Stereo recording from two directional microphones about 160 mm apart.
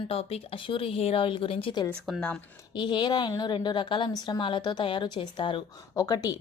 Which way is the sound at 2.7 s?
30° left (ahead or behind).